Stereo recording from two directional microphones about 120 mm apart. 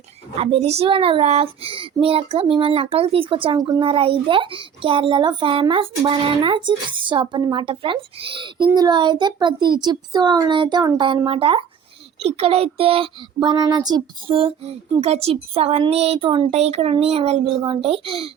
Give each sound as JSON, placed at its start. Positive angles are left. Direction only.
{"t": 0.3, "sound": "speech", "side_deg": -60}
{"t": 13.4, "sound": "speech", "side_deg": -40}